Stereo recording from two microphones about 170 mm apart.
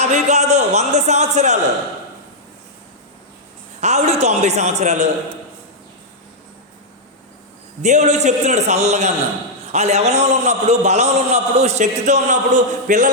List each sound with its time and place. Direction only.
0.0 s a man's voice: 40° right (ahead or behind)
3.8 s a man's voice: 40° right (ahead or behind)
7.8 s a man's voice: 45° right (ahead or behind)